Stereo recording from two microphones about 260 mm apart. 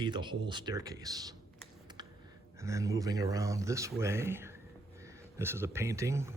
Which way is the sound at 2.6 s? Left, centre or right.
Centre.